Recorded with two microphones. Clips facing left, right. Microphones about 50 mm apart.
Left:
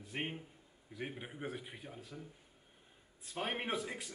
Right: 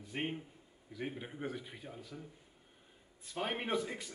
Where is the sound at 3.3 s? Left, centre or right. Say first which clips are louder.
Right 2 dB; centre.